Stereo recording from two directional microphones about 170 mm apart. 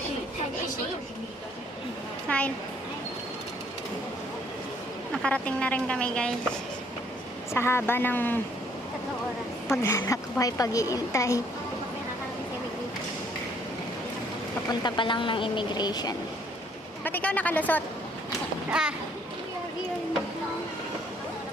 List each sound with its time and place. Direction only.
2.3 s speech: 10° left (ahead or behind)
5.1 s speech: 5° left (ahead or behind)
7.5 s speech: 15° left (ahead or behind)
9.7 s a woman's voice: 15° left (ahead or behind)
14.7 s a woman's voice: 25° left (ahead or behind)
17.0 s speech: 10° left (ahead or behind)
18.7 s a child's voice: 5° right (ahead or behind)